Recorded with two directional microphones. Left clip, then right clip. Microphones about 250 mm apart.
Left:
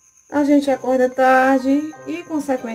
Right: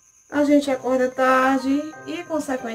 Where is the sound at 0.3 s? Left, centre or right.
Centre.